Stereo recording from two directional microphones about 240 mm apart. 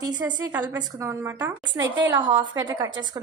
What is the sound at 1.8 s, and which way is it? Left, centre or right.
Speech, right.